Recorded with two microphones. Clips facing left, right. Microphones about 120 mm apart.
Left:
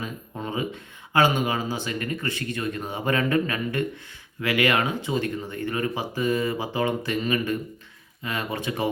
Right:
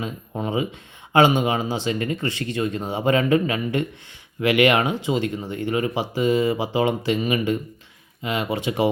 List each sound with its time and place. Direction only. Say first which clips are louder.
0.0 s speech: right 5 dB; 20° right (ahead or behind)